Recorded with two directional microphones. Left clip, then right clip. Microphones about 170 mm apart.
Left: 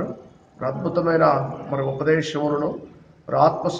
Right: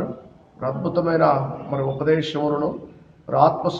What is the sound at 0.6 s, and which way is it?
A man's voice, 15° left (ahead or behind).